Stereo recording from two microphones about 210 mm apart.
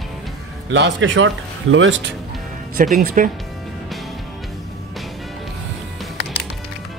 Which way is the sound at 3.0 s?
40° right (ahead or behind).